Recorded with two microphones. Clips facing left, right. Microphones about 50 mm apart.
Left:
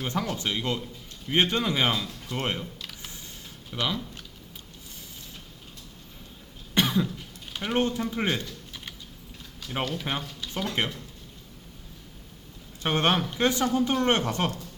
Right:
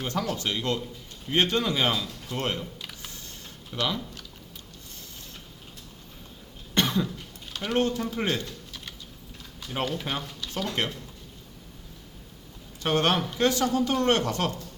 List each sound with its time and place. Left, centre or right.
0.1 s speech: centre
3.0 s a sound: centre
6.7 s cough: centre
7.5 s speech: centre
9.8 s speech: centre
10.1 s speech: centre
12.8 s speech: left